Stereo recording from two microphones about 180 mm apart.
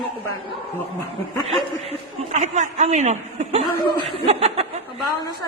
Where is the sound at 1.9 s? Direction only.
40° right (ahead or behind).